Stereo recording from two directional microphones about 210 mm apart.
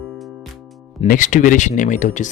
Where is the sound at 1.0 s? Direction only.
35° left (ahead or behind).